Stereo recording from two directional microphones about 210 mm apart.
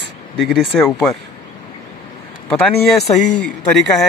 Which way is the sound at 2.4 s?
5° left (ahead or behind).